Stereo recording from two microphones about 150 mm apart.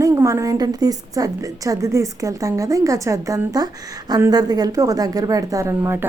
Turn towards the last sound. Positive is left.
turn(degrees=-15)  # may be behind; listen again after turning